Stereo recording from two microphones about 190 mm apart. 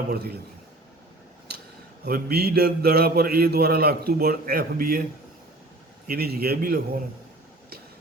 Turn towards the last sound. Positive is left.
turn(degrees=-50)  # may be behind; listen again after turning